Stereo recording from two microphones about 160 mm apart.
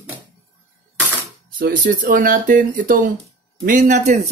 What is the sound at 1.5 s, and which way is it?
Speech, 65° right (ahead or behind).